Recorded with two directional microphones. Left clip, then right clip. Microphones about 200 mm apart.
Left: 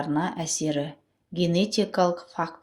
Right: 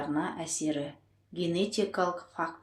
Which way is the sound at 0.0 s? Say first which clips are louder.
Left 5 dB; 40° left (ahead or behind).